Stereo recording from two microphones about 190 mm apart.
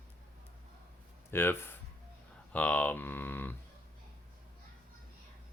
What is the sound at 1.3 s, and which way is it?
Speech, 10° left (ahead or behind).